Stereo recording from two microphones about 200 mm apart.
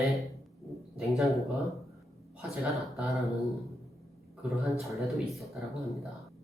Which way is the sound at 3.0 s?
Centre (ahead or behind).